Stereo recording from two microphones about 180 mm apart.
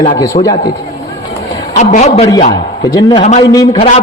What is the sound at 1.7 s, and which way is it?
A man's voice, 40° left (ahead or behind).